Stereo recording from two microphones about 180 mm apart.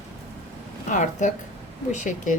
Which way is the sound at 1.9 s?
45° left (ahead or behind).